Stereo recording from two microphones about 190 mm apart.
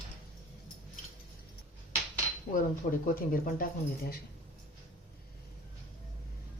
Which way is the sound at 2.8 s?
45° left (ahead or behind).